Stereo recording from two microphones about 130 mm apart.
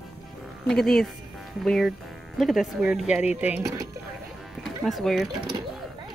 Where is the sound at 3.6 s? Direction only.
25° right (ahead or behind).